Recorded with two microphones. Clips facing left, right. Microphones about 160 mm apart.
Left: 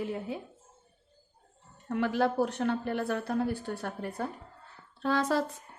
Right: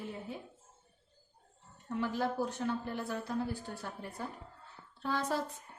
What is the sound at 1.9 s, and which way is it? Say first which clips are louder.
A woman's voice: left 6 dB; 75° left (ahead or behind).